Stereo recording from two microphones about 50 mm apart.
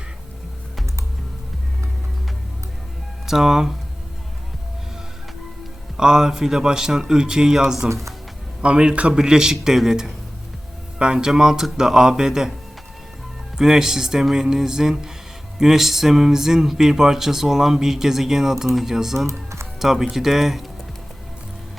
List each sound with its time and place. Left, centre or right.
3.2 s speech: centre
6.0 s speech: centre
8.6 s speech: right
13.6 s speech: centre
19.3 s speech: right
19.8 s speech: centre